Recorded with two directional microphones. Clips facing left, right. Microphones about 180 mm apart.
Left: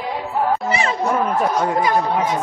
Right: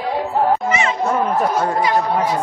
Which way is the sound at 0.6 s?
35° left (ahead or behind).